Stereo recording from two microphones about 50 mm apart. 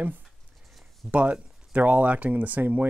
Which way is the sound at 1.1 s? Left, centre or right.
Right.